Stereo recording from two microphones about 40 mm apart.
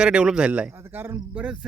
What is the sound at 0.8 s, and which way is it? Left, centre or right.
Speech, right.